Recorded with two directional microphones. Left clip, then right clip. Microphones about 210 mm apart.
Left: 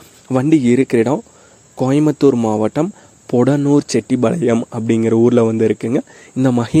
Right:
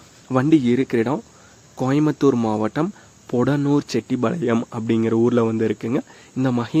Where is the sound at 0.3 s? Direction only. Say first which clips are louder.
Left 4 dB; 20° left (ahead or behind).